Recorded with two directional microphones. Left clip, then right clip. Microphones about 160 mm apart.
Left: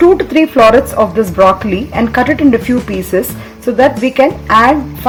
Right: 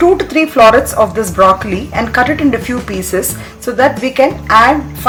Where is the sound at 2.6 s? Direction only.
Centre (ahead or behind).